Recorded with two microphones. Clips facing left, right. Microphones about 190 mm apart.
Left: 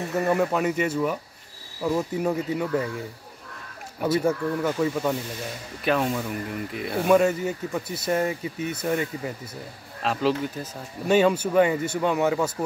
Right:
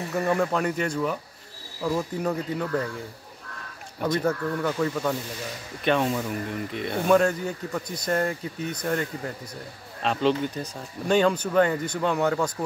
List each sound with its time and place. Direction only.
0.1 s speech: 5° left (ahead or behind)
4.0 s speech: 10° left (ahead or behind)